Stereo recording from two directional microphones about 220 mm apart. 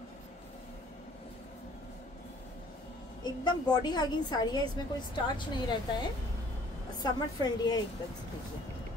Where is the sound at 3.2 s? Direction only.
20° left (ahead or behind).